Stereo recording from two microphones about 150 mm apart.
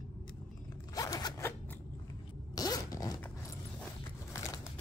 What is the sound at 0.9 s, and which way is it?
Zipper, 25° left (ahead or behind).